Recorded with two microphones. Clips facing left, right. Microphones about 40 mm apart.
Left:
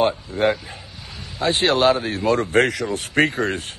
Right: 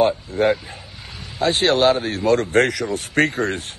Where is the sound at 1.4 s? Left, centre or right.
Centre.